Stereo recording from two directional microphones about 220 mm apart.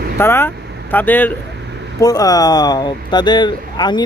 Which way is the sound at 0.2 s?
10° left (ahead or behind).